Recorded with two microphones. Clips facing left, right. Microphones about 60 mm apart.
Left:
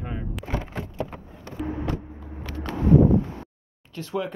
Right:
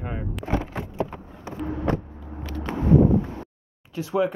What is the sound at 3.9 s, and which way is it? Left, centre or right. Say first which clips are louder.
Speech: right 6 dB; centre.